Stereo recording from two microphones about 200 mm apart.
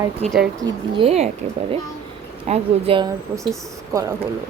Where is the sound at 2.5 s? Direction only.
25° right (ahead or behind).